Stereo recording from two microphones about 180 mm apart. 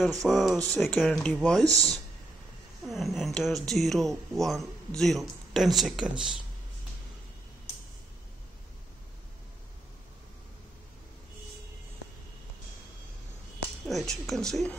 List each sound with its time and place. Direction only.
0.3 s speech: centre (ahead or behind)
1.6 s speech: 20° right (ahead or behind)
2.8 s speech: centre (ahead or behind)
13.8 s speech: centre (ahead or behind)